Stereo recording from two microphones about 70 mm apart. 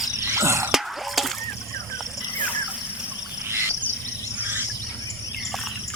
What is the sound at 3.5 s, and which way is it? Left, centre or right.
Insect, right.